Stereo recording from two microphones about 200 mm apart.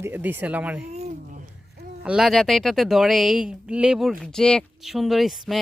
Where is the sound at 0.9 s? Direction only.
35° right (ahead or behind).